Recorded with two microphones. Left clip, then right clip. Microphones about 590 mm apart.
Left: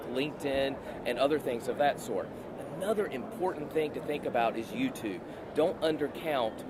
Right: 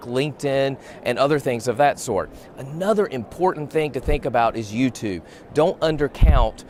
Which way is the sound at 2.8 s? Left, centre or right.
Right.